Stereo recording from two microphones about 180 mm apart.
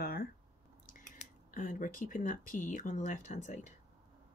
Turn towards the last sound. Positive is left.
turn(degrees=45)  # may be behind; listen again after turning